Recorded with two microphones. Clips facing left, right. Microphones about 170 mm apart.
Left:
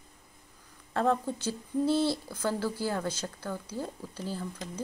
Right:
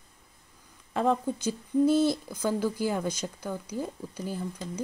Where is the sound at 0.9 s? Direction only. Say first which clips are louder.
Right 1 dB; 15° right (ahead or behind).